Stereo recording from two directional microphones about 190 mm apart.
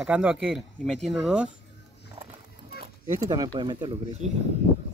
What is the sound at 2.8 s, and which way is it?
Keys jangling, 20° right (ahead or behind).